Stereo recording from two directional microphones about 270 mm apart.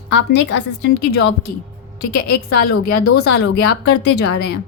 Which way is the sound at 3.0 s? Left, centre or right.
Left.